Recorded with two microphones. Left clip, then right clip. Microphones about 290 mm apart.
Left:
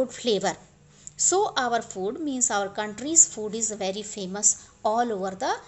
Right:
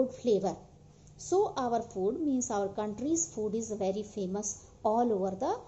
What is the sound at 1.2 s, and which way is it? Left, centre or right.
Speech, left.